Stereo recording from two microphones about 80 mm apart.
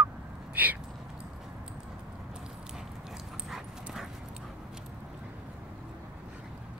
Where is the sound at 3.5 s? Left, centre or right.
Centre.